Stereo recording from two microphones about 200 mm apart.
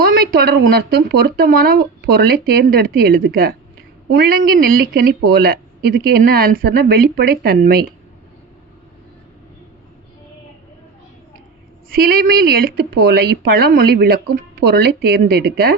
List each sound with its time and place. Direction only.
0.0 s speech: 50° right (ahead or behind)
11.9 s speech: 45° right (ahead or behind)